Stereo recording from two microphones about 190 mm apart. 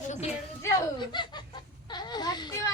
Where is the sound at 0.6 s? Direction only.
20° left (ahead or behind).